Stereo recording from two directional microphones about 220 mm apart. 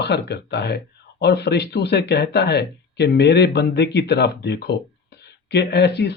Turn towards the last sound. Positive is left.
turn(degrees=50)  # may be behind; listen again after turning